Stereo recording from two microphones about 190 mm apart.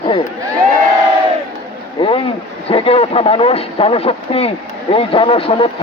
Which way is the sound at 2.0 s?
25° left (ahead or behind).